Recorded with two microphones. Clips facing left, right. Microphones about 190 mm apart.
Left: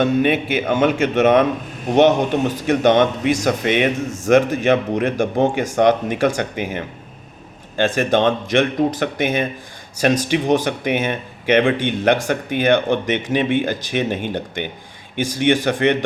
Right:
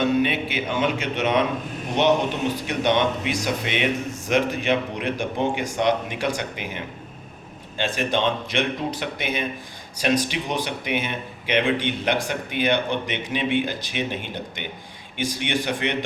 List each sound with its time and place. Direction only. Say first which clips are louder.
0.0 s speech: left 4 dB; 50° left (ahead or behind)
2.6 s speech: left 8 dB; 45° left (ahead or behind)